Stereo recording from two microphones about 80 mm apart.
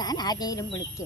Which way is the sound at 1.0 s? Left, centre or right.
Left.